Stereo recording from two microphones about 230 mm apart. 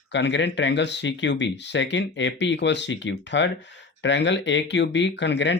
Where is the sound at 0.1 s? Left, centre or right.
Left.